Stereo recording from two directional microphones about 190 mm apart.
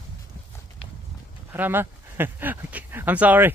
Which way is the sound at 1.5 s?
10° right (ahead or behind).